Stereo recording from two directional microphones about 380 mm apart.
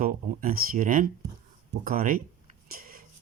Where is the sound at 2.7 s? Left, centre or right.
Right.